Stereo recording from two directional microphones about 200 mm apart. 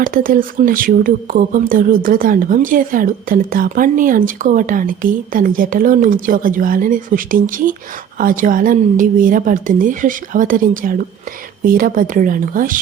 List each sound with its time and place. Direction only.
0.0 s speech: 45° right (ahead or behind)